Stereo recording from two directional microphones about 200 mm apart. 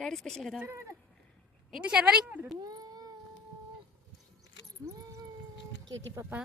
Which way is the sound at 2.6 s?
20° right (ahead or behind).